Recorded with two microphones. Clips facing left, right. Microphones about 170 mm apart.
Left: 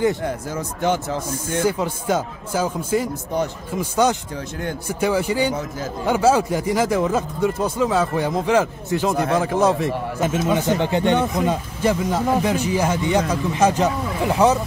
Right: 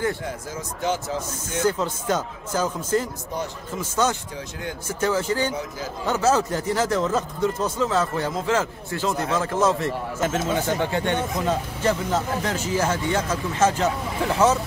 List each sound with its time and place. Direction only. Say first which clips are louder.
0.2 s speech: left 6 dB; 60° left (ahead or behind)
1.7 s speech: even; 10° left (ahead or behind)